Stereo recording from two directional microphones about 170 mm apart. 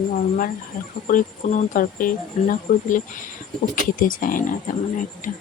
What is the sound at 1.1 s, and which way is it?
Speech, 50° left (ahead or behind).